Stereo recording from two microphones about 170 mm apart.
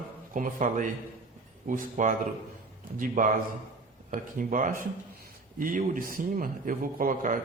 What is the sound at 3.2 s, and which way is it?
A man's voice, 55° right (ahead or behind).